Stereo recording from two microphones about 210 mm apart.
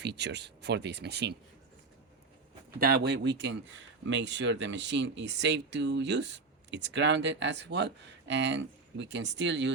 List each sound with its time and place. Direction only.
0.0 s speech: 55° right (ahead or behind)
2.8 s speech: 50° right (ahead or behind)